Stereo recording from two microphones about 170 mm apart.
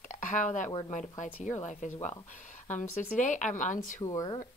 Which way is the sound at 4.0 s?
20° left (ahead or behind).